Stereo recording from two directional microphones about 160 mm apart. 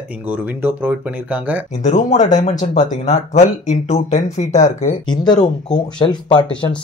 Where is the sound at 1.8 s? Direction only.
50° left (ahead or behind).